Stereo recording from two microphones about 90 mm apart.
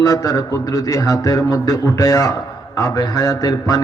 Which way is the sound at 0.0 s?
40° left (ahead or behind).